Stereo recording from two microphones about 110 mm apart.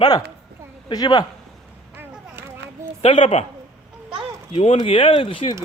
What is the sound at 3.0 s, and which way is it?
Speech, 60° left (ahead or behind).